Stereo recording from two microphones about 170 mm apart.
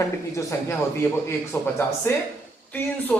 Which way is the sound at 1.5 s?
15° left (ahead or behind).